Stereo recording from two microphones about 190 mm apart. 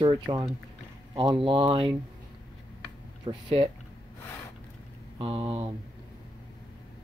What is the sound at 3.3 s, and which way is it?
Speech, 25° right (ahead or behind).